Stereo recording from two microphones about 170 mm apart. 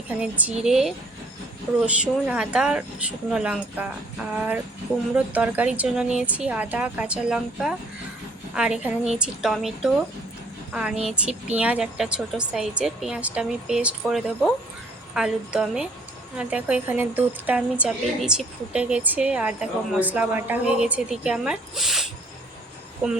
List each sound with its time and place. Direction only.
0.2 s a woman's voice: 5° right (ahead or behind)
5.1 s a woman's voice: 10° right (ahead or behind)